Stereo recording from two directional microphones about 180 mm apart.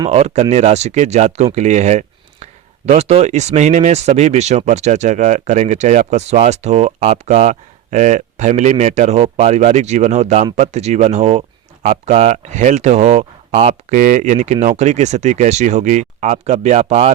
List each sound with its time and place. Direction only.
0.0 s speech: 35° right (ahead or behind)